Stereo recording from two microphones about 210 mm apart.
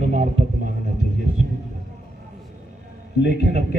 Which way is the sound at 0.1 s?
35° right (ahead or behind).